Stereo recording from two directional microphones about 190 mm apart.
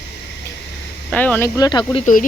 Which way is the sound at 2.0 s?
45° left (ahead or behind).